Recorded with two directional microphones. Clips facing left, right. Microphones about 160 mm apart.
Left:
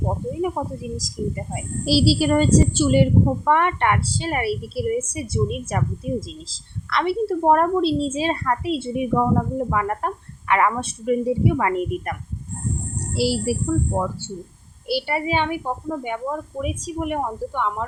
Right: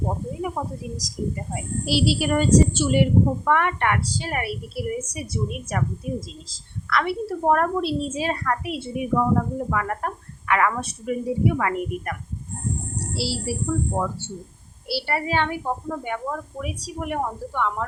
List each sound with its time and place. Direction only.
0.5 s a woman's voice: 25° left (ahead or behind)
1.8 s a woman's voice: 35° left (ahead or behind)
13.1 s speech: 15° left (ahead or behind)